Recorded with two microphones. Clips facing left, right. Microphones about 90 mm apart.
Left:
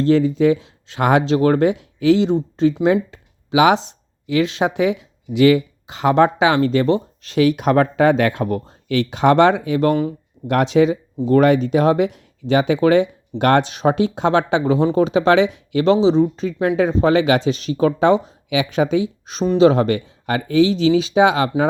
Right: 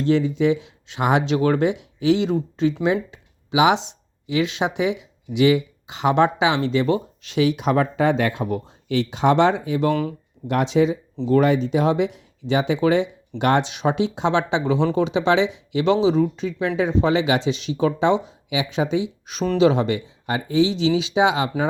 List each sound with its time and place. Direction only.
0.0 s speech: 45° left (ahead or behind)
2.8 s speech: 45° left (ahead or behind)
6.8 s speech: 35° left (ahead or behind); by 9.9 s 60° left (ahead or behind)
9.9 s speech: 25° left (ahead or behind)
10.4 s speech: 60° left (ahead or behind)
19.2 s speech: 35° left (ahead or behind); by 21.5 s 50° left (ahead or behind)